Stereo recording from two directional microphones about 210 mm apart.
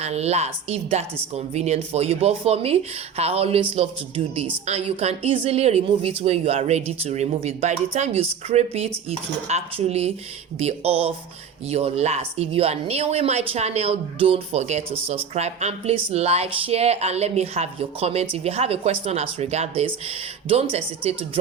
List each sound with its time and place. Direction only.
0.0 s speech: 30° right (ahead or behind)